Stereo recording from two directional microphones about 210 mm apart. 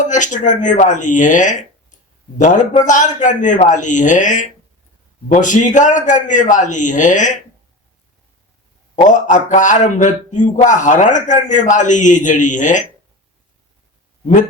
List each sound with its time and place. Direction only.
0.1 s speech: 35° left (ahead or behind)
9.0 s speech: 35° left (ahead or behind)